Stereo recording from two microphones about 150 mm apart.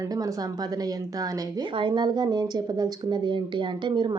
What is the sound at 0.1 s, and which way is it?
A woman's voice, 25° right (ahead or behind).